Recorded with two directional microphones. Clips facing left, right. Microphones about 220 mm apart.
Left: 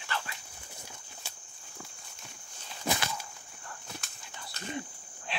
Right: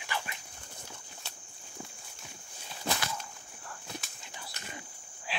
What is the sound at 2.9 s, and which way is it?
Walk, 5° left (ahead or behind).